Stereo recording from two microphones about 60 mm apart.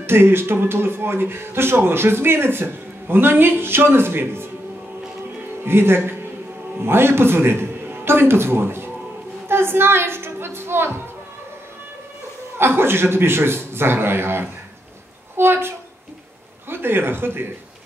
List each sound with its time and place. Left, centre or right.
0.0 s speech: right
5.6 s a man's voice: right
9.5 s a sound: right
12.5 s speech: right